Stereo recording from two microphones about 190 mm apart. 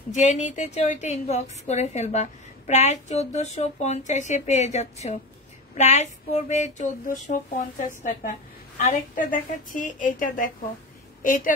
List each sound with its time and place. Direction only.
0.1 s a woman's voice: 40° left (ahead or behind)